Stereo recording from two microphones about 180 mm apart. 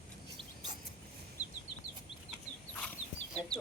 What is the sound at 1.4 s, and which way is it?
Chicken, 20° left (ahead or behind).